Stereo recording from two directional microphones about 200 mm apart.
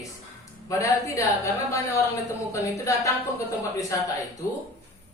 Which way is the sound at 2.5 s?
15° left (ahead or behind).